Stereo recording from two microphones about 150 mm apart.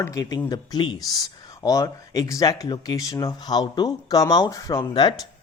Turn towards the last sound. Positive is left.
turn(degrees=30)  # may be behind; listen again after turning